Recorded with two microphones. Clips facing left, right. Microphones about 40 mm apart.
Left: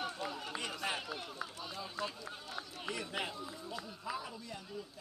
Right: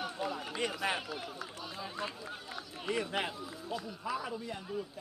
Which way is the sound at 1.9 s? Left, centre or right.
Centre.